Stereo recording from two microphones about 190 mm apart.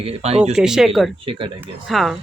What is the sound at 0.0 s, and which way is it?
Speech, 35° right (ahead or behind).